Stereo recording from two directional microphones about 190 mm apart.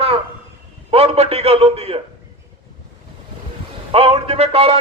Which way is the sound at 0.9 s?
30° right (ahead or behind).